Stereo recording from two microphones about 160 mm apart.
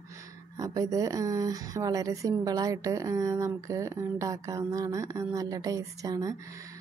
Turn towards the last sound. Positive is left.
turn(degrees=-20)  # may be behind; listen again after turning